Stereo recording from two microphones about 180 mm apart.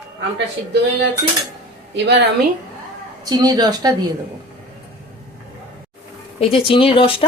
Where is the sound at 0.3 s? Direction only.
75° right (ahead or behind).